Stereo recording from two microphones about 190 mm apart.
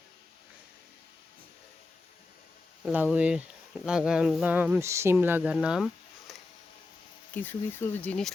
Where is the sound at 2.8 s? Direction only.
5° right (ahead or behind).